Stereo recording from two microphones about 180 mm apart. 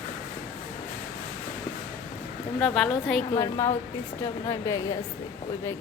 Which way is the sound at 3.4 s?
15° left (ahead or behind).